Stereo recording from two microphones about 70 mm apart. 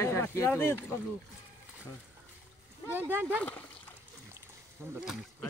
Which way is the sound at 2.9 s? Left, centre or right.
Right.